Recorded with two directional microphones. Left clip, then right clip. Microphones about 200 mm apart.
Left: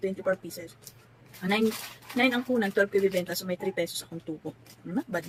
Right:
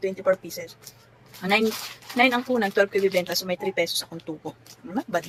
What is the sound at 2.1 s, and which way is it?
Speech, 15° left (ahead or behind).